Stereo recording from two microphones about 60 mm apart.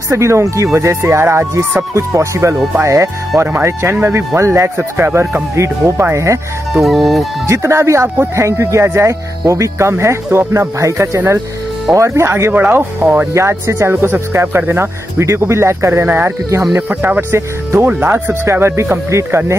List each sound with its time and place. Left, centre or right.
0.1 s speech: right
6.7 s fowl: centre
7.4 s speech: right
12.5 s speech: right
13.3 s speech: right